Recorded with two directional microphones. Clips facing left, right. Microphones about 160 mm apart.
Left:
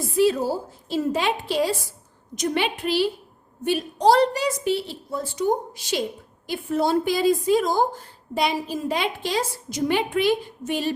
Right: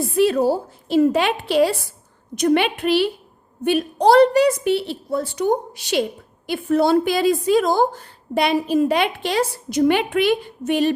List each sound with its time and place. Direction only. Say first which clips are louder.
0.2 s a woman's voice: right 3 dB; 65° right (ahead or behind)